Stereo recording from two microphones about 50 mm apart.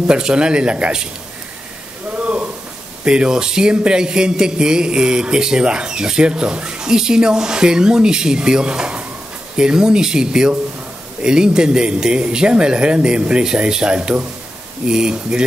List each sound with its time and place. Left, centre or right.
0.0 s speech: centre
2.1 s a sound: right
3.1 s a man's voice: centre